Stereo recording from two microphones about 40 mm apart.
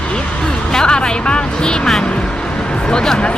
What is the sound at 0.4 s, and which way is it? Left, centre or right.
Music, centre.